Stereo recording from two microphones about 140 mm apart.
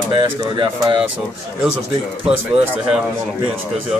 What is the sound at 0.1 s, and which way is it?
Speech, 35° right (ahead or behind).